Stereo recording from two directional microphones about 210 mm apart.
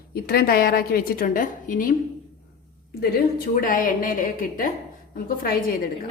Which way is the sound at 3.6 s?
40° left (ahead or behind).